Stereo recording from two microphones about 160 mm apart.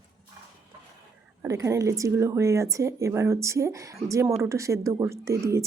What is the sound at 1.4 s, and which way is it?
Speech, 20° right (ahead or behind).